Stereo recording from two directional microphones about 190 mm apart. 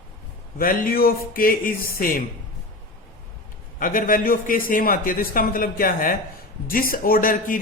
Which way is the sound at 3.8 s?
45° left (ahead or behind).